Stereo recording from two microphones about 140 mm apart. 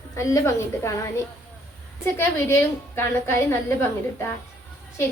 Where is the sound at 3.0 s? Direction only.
15° left (ahead or behind).